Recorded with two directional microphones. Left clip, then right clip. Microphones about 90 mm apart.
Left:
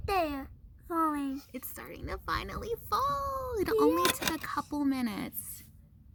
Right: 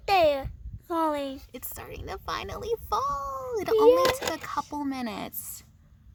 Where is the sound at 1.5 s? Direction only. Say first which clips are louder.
Right 3 dB; 30° right (ahead or behind).